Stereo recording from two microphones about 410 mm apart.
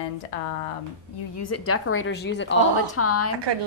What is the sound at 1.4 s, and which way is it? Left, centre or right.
A woman's voice, left.